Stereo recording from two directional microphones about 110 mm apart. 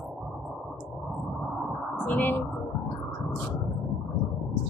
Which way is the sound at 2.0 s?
15° left (ahead or behind).